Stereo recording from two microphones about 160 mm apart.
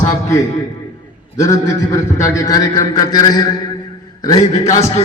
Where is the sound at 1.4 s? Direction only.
20° left (ahead or behind).